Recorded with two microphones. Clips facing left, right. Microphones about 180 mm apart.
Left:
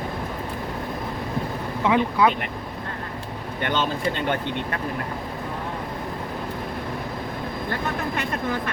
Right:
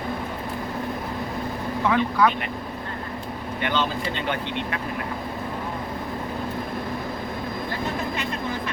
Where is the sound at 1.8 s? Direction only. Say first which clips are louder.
Left 1 dB; 15° left (ahead or behind).